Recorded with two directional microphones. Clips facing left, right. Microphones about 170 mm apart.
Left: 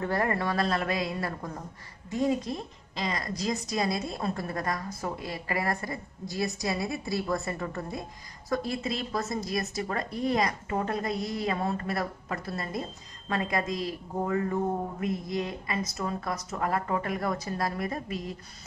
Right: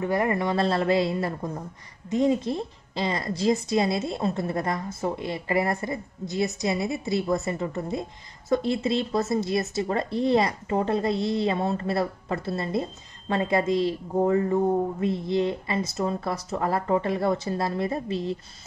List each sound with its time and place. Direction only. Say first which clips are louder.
0.0 s a woman's voice: right 4 dB; 15° right (ahead or behind)